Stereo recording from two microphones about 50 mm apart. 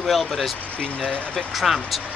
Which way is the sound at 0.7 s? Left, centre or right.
Left.